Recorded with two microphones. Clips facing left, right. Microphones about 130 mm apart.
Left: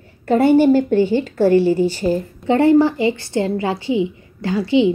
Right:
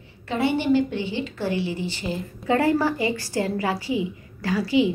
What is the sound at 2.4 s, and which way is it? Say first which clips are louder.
A woman's voice: left 7 dB; 25° left (ahead or behind).